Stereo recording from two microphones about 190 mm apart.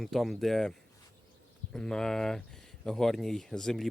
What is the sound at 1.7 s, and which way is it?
Speech, 5° left (ahead or behind).